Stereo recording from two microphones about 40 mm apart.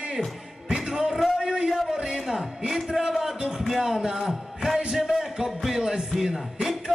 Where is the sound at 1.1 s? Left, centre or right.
Centre.